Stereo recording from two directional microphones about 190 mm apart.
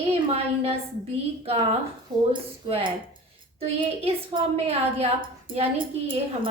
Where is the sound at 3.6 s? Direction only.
30° right (ahead or behind).